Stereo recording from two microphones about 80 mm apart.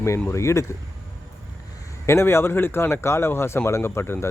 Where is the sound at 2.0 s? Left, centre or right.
Left.